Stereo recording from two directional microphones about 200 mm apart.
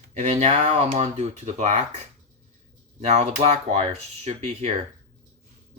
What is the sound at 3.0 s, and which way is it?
Speech, 35° right (ahead or behind).